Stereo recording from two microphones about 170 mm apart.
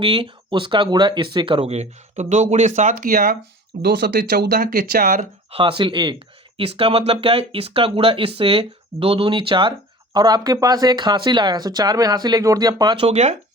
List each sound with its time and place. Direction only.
0.0 s speech: 30° right (ahead or behind)
2.9 s speech: 55° right (ahead or behind)
3.8 s speech: 75° right (ahead or behind); by 5.2 s 55° right (ahead or behind)
5.5 s speech: 30° right (ahead or behind)